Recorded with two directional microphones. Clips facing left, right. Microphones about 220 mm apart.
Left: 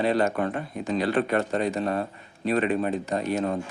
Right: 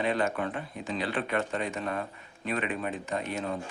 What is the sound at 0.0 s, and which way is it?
Speech, 40° left (ahead or behind).